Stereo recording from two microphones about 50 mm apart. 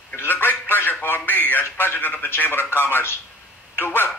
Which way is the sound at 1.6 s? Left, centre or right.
Left.